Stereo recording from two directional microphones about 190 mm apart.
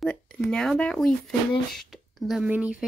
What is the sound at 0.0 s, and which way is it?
Speech, 5° left (ahead or behind).